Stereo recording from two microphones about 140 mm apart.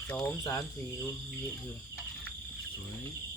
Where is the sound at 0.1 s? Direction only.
20° left (ahead or behind).